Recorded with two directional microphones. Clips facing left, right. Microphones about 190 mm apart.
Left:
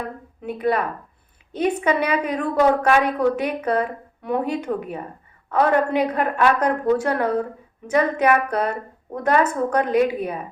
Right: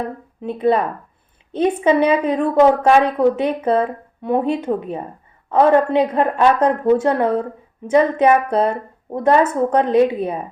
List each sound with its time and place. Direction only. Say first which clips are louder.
0.4 s a woman's voice: right 5 dB; 25° right (ahead or behind)